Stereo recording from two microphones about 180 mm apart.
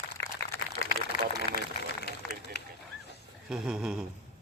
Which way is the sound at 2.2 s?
Centre (ahead or behind).